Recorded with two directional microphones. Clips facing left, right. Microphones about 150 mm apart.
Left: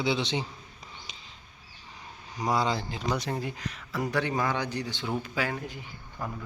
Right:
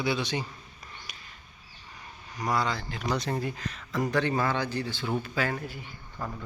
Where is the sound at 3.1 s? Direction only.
10° left (ahead or behind).